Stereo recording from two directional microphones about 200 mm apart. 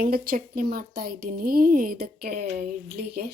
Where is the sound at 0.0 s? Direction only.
45° right (ahead or behind).